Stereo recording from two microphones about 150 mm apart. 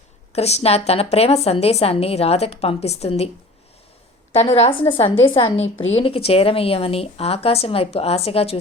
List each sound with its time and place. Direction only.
0.3 s a woman's voice: 45° left (ahead or behind)
4.3 s a woman's voice: 40° left (ahead or behind)